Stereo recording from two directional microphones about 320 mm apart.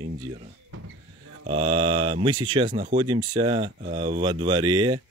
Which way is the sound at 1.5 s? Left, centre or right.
Centre.